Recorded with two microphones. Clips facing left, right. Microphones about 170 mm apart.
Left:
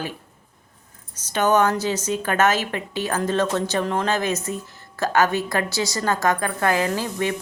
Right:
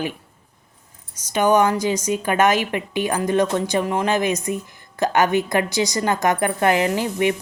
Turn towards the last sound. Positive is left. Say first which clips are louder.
# right 4 dB
turn(degrees=-15)  # may be behind; listen again after turning